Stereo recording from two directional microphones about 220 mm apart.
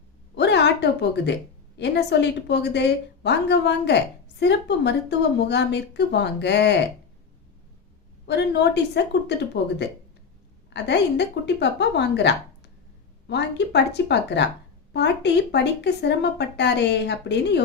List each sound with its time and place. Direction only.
0.3 s a sound: 50° left (ahead or behind)
1.8 s speech: 50° left (ahead or behind)
8.3 s speech: 50° left (ahead or behind)
10.8 s speech: 50° left (ahead or behind)